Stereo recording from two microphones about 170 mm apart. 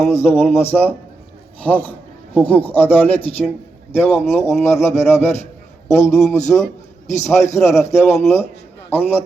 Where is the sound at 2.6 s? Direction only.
35° left (ahead or behind).